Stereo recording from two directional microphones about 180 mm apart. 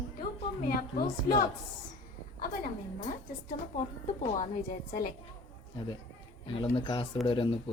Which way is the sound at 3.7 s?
40° left (ahead or behind).